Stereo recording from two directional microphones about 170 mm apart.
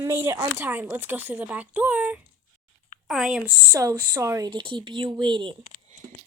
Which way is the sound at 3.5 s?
20° right (ahead or behind).